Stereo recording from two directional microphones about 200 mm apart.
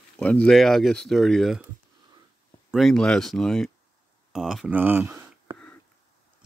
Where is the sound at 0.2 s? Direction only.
5° left (ahead or behind).